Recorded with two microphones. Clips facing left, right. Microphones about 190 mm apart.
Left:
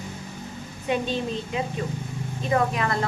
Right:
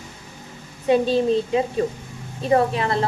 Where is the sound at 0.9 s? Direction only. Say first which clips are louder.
Right 8 dB; 35° right (ahead or behind).